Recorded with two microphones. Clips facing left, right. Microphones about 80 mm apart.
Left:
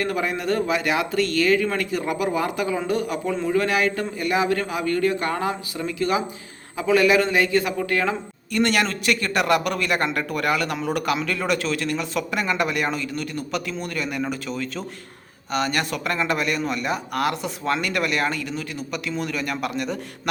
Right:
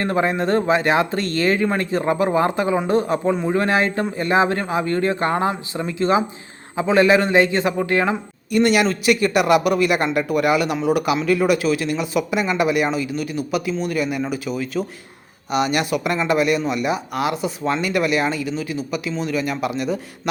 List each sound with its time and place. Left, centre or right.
0.0 s a man's voice: right
8.5 s speech: centre